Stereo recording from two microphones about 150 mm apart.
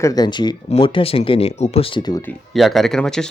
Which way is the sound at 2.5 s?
Centre (ahead or behind).